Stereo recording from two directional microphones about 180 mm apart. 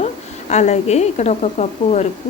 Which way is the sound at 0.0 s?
40° left (ahead or behind).